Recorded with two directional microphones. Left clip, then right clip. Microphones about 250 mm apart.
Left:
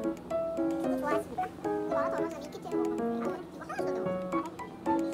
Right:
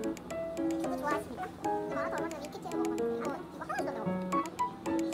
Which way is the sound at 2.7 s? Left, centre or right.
Centre.